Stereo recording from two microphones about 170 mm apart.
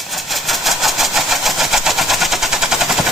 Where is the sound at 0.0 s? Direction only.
Centre (ahead or behind).